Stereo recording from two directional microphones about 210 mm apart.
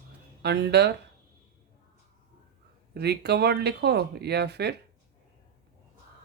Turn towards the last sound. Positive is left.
turn(degrees=-50)  # may be behind; listen again after turning